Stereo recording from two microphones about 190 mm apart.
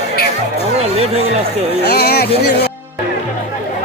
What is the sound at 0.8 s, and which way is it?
Chatter, 30° right (ahead or behind).